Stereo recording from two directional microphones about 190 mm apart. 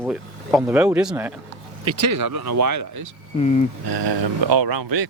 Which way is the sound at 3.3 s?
30° left (ahead or behind).